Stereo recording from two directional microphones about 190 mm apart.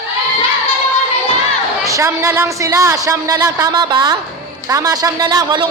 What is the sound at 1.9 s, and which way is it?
A man's voice, 15° right (ahead or behind).